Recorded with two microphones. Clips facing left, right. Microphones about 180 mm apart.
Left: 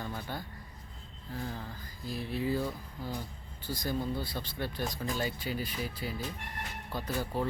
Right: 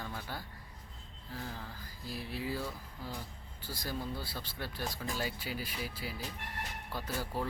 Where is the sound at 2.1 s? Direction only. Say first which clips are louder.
Left 6 dB; 5° right (ahead or behind).